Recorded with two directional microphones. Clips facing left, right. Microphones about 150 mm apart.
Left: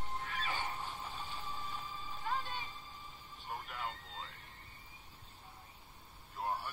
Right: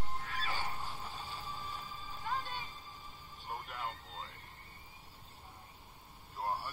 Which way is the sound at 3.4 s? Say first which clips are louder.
Right 1 dB; 40° right (ahead or behind).